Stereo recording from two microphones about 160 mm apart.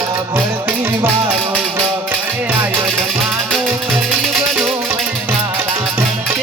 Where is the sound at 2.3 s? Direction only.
10° right (ahead or behind).